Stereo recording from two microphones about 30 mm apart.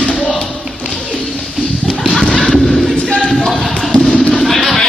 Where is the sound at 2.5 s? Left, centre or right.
Centre.